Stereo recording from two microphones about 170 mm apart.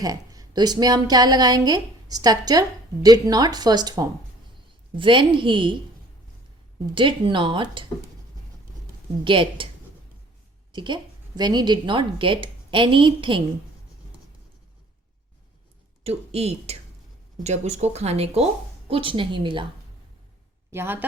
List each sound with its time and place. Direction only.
0.0 s a woman's voice: 20° right (ahead or behind)
6.9 s a woman's voice: 30° right (ahead or behind)
9.2 s a woman's voice: 30° right (ahead or behind)
10.7 s a woman's voice: 25° right (ahead or behind)
16.0 s a woman's voice: 35° right (ahead or behind)
20.7 s a woman's voice: 15° right (ahead or behind)